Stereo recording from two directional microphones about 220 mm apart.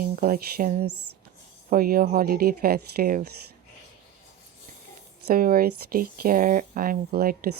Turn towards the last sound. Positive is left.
turn(degrees=-40)  # may be behind; listen again after turning